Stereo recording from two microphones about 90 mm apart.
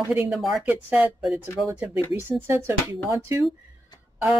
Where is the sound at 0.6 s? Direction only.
15° right (ahead or behind).